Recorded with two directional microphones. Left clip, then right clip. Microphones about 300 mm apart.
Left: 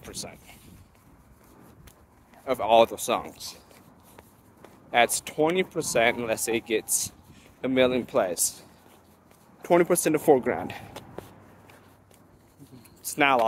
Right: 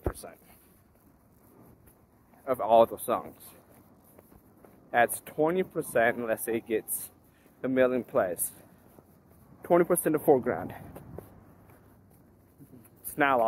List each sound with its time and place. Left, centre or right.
2.4 s speech: centre
4.9 s speech: centre
9.6 s speech: centre
13.1 s speech: centre